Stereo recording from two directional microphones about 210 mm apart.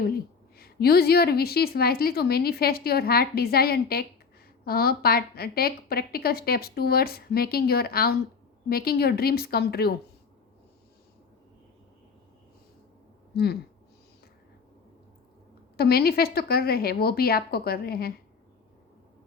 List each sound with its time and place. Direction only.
0.5 s a woman's voice: 45° left (ahead or behind)
13.3 s a woman's voice: 50° left (ahead or behind)
15.8 s a woman's voice: 45° left (ahead or behind)